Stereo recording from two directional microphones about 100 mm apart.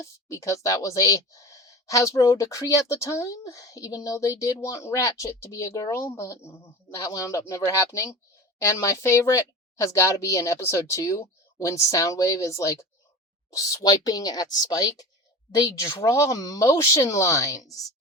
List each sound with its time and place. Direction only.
0.0 s speech: 30° left (ahead or behind)